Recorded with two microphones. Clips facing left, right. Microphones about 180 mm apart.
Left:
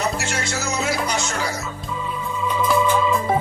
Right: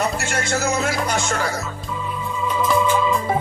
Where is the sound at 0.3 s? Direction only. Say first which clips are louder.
Right 4 dB; 50° right (ahead or behind).